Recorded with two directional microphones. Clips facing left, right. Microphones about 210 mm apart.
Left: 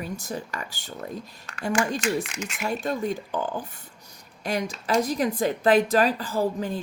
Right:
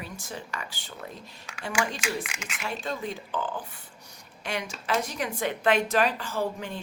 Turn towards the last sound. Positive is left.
turn(degrees=35)  # may be behind; listen again after turning